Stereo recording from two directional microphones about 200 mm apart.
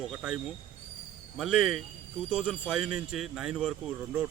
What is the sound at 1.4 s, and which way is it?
Speech, centre (ahead or behind).